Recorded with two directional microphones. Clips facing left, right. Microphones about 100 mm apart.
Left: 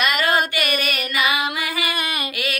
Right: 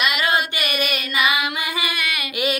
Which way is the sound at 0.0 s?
40° left (ahead or behind).